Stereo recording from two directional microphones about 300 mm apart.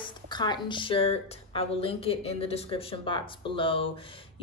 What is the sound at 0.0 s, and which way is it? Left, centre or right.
Speech, centre.